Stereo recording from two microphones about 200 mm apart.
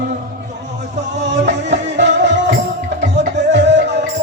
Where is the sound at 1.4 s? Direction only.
35° right (ahead or behind).